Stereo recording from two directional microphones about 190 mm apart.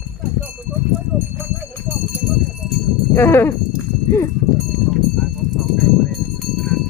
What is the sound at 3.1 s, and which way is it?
Speech, 15° left (ahead or behind).